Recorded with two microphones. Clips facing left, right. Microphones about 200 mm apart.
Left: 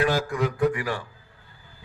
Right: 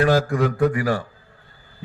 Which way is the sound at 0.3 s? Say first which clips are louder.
Right 4 dB; 40° right (ahead or behind).